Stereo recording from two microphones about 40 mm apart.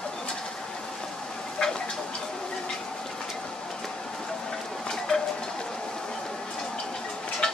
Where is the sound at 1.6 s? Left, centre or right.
Left.